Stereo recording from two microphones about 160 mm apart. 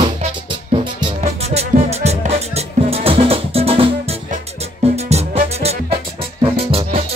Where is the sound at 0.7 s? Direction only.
45° right (ahead or behind).